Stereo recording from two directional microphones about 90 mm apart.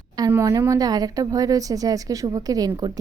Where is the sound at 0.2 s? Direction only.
45° right (ahead or behind).